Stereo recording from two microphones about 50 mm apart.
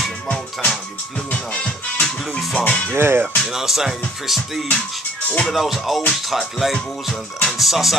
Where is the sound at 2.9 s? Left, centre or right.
Right.